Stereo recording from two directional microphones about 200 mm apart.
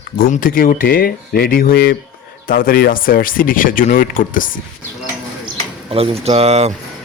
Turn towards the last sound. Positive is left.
turn(degrees=-30)  # may be behind; listen again after turning